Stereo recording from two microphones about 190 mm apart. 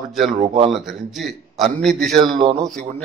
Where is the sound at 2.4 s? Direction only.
20° right (ahead or behind).